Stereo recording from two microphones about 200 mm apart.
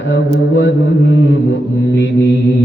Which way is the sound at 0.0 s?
65° left (ahead or behind).